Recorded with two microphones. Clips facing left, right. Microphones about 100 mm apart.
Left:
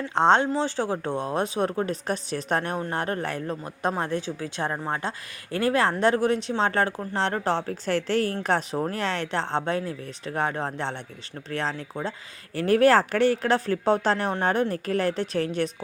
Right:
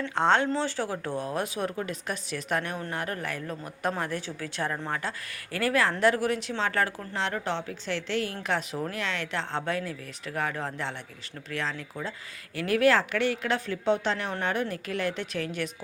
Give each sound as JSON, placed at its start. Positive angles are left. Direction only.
{"t": 0.1, "sound": "speech", "side_deg": 25}